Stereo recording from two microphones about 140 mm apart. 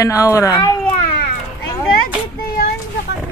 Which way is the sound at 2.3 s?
90° left.